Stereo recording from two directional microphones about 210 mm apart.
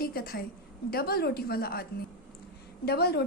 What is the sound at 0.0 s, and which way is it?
A woman's voice, 45° left (ahead or behind).